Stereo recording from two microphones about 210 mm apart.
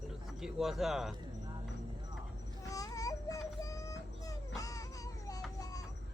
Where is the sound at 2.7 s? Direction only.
15° left (ahead or behind).